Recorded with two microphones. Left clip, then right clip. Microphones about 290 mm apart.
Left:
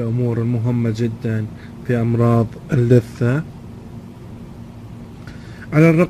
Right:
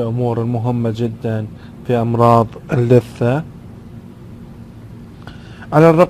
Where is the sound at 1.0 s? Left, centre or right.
Right.